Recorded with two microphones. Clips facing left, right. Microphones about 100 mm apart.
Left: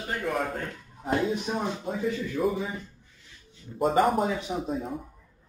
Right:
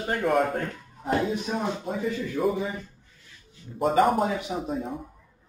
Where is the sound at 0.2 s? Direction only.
55° right (ahead or behind).